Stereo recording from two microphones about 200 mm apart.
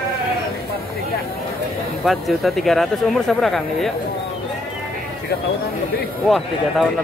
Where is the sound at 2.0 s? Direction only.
Centre (ahead or behind).